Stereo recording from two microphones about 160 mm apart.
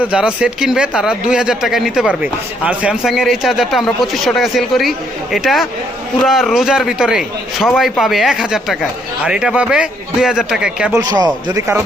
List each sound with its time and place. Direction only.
0.1 s speech: 5° right (ahead or behind)
10.9 s a man's voice: 25° right (ahead or behind)